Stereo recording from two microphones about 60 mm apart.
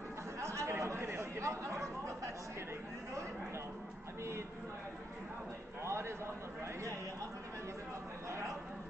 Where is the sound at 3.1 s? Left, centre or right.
Right.